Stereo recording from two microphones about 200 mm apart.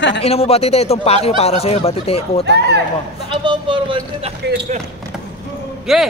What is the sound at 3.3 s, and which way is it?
Speech, 25° right (ahead or behind).